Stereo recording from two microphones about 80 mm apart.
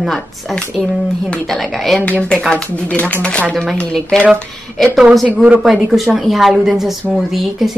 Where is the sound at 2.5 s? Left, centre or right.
Centre.